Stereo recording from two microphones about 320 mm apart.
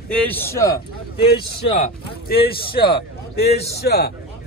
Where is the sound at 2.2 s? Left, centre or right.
Left.